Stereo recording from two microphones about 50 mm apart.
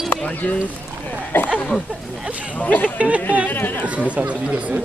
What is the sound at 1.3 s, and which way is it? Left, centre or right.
Speech, left.